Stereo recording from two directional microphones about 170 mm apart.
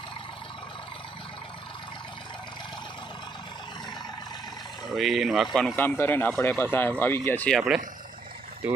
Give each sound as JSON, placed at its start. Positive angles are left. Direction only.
{"t": 4.9, "sound": "speech", "side_deg": 0}
{"t": 5.7, "sound": "speech", "side_deg": 10}